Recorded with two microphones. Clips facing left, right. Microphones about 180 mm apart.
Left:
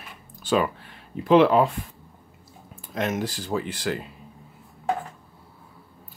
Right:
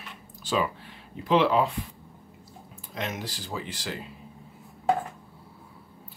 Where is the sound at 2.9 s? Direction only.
50° left (ahead or behind).